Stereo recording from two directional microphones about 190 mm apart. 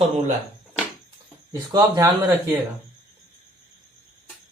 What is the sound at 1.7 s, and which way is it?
Speech, 20° right (ahead or behind).